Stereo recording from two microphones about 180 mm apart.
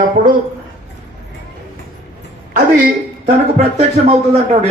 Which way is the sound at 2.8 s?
40° right (ahead or behind).